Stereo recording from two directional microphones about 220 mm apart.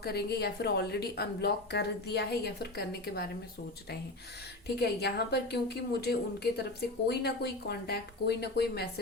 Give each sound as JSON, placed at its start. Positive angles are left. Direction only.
{"t": 0.0, "sound": "a woman's voice", "side_deg": 45}
{"t": 4.8, "sound": "a woman's voice", "side_deg": 50}